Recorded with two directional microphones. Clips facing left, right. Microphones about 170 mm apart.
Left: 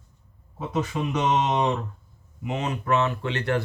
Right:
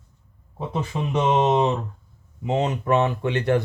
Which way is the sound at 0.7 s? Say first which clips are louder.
Right 1 dB; 30° right (ahead or behind).